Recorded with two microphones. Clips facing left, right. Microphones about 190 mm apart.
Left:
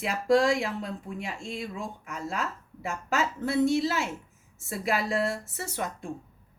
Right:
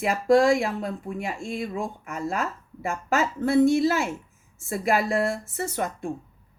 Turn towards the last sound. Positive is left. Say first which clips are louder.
# right 5 dB
turn(degrees=-50)  # may be behind; listen again after turning